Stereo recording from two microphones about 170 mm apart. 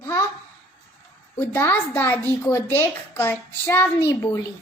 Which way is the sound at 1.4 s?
15° left (ahead or behind).